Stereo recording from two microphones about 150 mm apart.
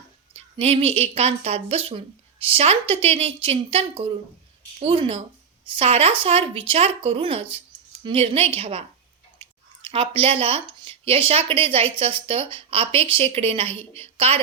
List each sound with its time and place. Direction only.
0.3 s a sound: 40° right (ahead or behind)
1.0 s a woman's voice: 45° right (ahead or behind)
9.4 s chewing: 40° right (ahead or behind)
10.2 s a woman's voice: 40° right (ahead or behind)